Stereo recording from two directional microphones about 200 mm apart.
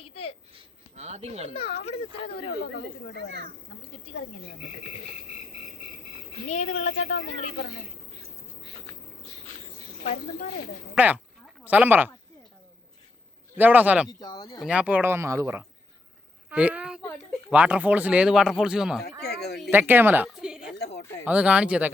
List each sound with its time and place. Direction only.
0.0 s a sound: 30° left (ahead or behind)
0.9 s speech: 35° right (ahead or behind)
1.5 s speech: 30° left (ahead or behind)
6.5 s speech: 35° left (ahead or behind)
10.9 s speech: 10° right (ahead or behind)
13.6 s speech: 10° right (ahead or behind)
14.1 s speech: 20° left (ahead or behind)
14.6 s speech: 5° right (ahead or behind)
19.2 s speech: 55° left (ahead or behind)
19.5 s a woman's voice: centre (ahead or behind)
20.7 s a sound: 55° left (ahead or behind)
21.2 s speech: 5° right (ahead or behind)